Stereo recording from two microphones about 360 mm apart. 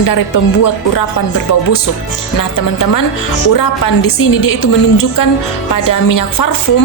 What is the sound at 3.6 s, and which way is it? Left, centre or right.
A woman's voice, left.